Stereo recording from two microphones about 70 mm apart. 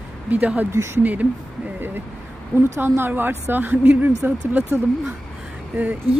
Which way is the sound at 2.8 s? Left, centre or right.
Right.